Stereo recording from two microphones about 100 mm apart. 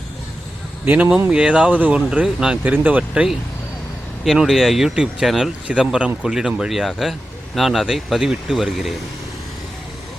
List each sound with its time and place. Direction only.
0.9 s speech: 20° right (ahead or behind)
1.3 s speech: 10° right (ahead or behind)
4.2 s speech: centre (ahead or behind)